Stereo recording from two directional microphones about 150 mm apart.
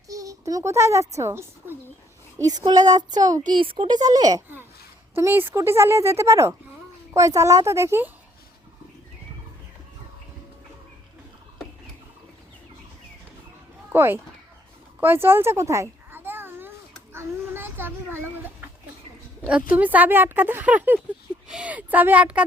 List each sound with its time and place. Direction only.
0.1 s a woman's voice: 20° right (ahead or behind)
5.1 s a woman's voice: 15° right (ahead or behind)
13.9 s speech: 15° right (ahead or behind)
15.0 s a sound: 15° right (ahead or behind)
19.7 s speech: 10° right (ahead or behind)